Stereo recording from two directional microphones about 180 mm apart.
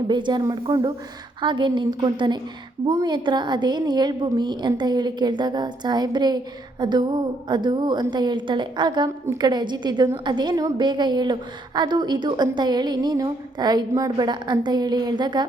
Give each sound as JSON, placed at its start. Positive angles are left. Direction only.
{"t": 0.1, "sound": "a woman's voice", "side_deg": -25}